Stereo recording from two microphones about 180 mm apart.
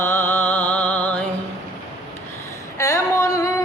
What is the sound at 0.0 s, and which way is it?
Music, 15° left (ahead or behind).